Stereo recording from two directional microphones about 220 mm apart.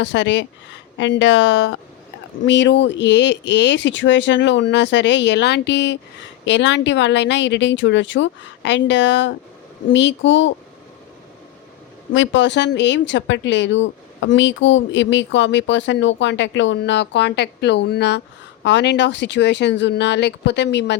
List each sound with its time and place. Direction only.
0.0 s speech: 55° left (ahead or behind)
12.1 s speech: 60° left (ahead or behind)